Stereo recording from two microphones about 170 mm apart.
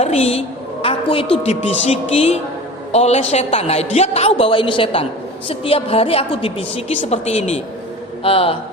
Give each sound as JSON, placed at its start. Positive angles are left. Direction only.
{"t": 0.0, "sound": "a woman's voice", "side_deg": 40}